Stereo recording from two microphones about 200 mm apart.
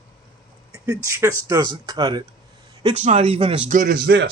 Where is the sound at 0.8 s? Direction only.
15° right (ahead or behind).